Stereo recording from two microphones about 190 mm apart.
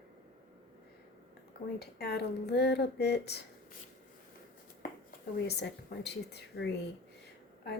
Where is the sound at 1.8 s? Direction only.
60° left (ahead or behind).